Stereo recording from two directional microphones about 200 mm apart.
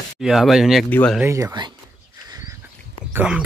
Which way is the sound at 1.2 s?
15° right (ahead or behind).